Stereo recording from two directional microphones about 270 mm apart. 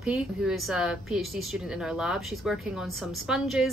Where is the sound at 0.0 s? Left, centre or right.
Centre.